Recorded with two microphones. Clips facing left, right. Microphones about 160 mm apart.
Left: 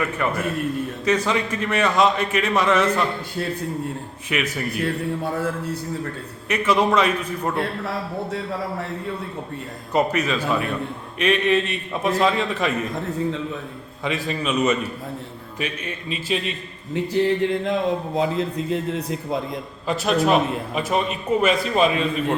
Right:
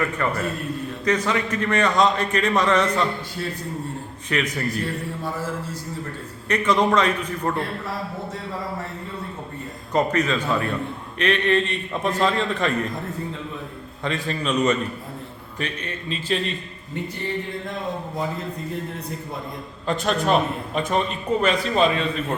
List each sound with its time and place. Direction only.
0.0 s a man's voice: 10° left (ahead or behind)
4.3 s a man's voice: 10° left (ahead or behind)
5.2 s a sound: 60° left (ahead or behind)
6.5 s a man's voice: 10° left (ahead or behind)
9.9 s a man's voice: 10° left (ahead or behind)
14.3 s a man's voice: 5° left (ahead or behind)
16.9 s a man's voice: 90° left
19.9 s a man's voice: 5° left (ahead or behind)